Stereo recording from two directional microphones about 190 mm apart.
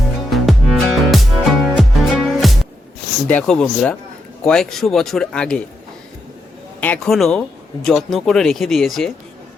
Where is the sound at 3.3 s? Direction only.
5° left (ahead or behind).